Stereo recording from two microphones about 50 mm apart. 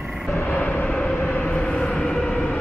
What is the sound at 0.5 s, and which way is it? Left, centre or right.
Vehicle, left.